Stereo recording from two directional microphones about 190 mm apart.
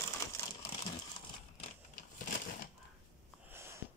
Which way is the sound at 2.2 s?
45° left (ahead or behind).